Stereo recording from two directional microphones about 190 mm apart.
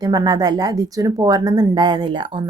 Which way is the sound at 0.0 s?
20° right (ahead or behind).